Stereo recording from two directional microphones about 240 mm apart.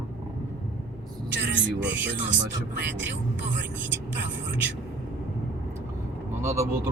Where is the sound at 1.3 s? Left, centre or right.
Right.